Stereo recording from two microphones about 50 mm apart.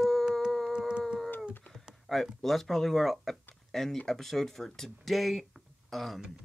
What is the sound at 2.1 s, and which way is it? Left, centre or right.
Speech, centre.